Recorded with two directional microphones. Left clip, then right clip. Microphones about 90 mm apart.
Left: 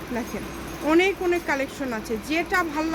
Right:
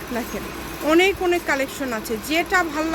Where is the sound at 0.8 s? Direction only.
20° right (ahead or behind).